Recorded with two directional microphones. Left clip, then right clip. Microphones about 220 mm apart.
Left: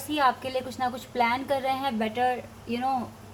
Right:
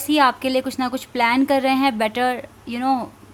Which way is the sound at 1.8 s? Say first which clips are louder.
Right 7 dB; 45° right (ahead or behind).